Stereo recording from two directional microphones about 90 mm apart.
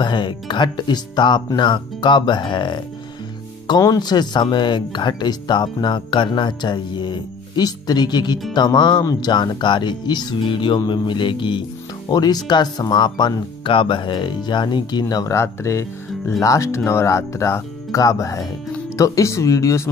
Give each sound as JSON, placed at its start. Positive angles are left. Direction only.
{"t": 0.0, "sound": "speech", "side_deg": 60}
{"t": 3.8, "sound": "speech", "side_deg": 50}
{"t": 12.1, "sound": "speech", "side_deg": 50}